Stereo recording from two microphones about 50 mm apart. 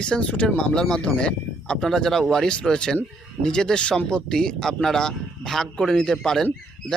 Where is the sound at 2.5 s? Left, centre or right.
Centre.